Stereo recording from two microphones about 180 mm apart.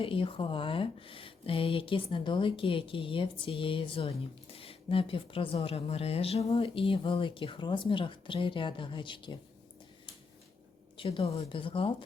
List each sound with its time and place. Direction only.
0.0 s a woman's voice: 30° left (ahead or behind)
10.9 s a woman's voice: 30° left (ahead or behind)